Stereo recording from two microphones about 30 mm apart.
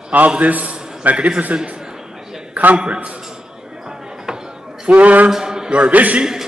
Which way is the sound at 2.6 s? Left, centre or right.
Right.